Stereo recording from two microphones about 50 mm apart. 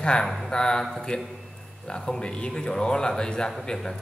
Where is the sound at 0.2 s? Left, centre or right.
Centre.